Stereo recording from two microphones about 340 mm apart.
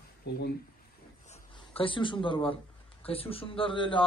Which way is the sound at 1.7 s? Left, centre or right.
Centre.